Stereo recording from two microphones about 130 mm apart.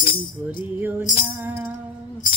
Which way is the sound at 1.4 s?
15° right (ahead or behind).